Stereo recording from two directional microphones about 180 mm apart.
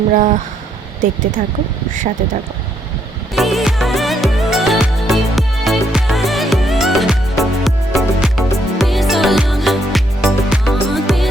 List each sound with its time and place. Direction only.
0.1 s speech: 45° right (ahead or behind)
1.4 s speech: 45° right (ahead or behind)
3.3 s music: centre (ahead or behind)